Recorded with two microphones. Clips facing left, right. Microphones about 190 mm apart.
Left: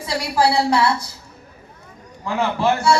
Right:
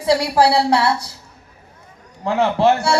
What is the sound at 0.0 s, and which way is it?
A man's voice, 70° right (ahead or behind).